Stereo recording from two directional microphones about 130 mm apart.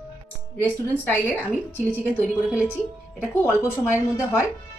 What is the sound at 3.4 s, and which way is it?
A woman's voice, 15° left (ahead or behind).